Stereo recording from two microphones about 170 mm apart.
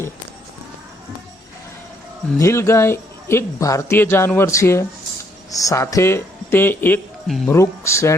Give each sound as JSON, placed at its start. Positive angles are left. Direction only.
{"t": 2.4, "sound": "speech", "side_deg": 15}
{"t": 7.3, "sound": "speech", "side_deg": 0}
{"t": 7.5, "sound": "speech", "side_deg": 15}